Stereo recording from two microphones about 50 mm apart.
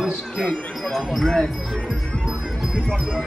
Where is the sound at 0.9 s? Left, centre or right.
Centre.